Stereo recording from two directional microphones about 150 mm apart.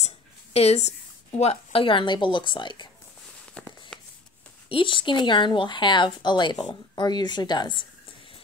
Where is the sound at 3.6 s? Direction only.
10° left (ahead or behind).